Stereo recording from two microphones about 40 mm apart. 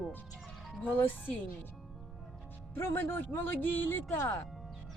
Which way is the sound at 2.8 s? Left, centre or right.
Left.